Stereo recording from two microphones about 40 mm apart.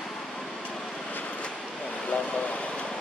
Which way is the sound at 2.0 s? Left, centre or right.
Left.